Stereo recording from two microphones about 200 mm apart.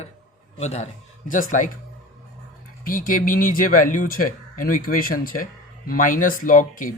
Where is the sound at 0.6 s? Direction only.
35° left (ahead or behind).